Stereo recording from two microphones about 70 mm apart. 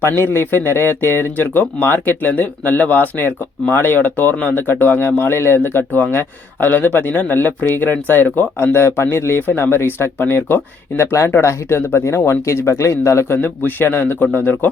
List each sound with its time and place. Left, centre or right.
0.2 s speech: left